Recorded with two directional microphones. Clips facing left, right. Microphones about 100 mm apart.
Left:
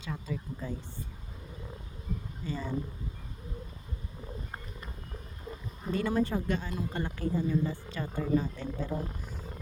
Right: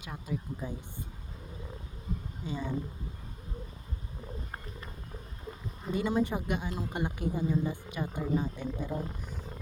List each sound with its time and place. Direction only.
0.0 s speech: 15° right (ahead or behind)
2.4 s speech: 15° right (ahead or behind)
5.9 s speech: 15° right (ahead or behind)
8.9 s speech: centre (ahead or behind)